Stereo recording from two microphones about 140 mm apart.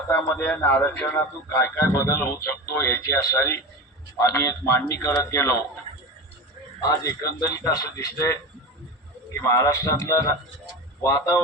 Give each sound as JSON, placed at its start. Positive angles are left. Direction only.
{"t": 0.1, "sound": "a man's voice", "side_deg": 15}
{"t": 6.8, "sound": "a man's voice", "side_deg": 25}
{"t": 9.4, "sound": "a man's voice", "side_deg": 25}